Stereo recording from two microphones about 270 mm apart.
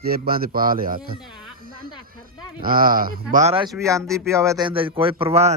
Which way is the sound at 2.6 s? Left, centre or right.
Right.